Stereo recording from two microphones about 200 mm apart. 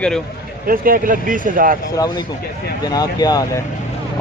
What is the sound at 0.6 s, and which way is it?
Speech, 45° right (ahead or behind).